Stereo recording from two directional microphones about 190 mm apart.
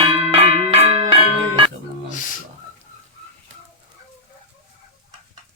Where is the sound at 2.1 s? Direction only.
45° left (ahead or behind).